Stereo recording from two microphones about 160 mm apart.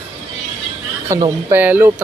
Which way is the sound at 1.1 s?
20° right (ahead or behind).